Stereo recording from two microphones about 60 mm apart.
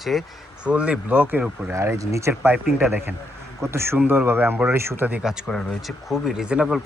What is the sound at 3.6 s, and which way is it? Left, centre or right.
Speech, right.